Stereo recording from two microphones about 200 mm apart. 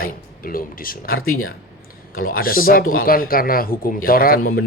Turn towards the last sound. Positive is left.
turn(degrees=50)  # may be behind; listen again after turning